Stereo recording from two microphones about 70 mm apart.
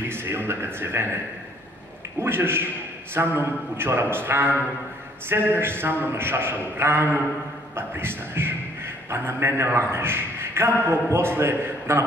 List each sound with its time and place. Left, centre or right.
0.1 s a man's voice: right
2.1 s a man's voice: right